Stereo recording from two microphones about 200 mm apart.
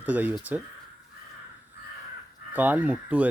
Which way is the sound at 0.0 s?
10° right (ahead or behind).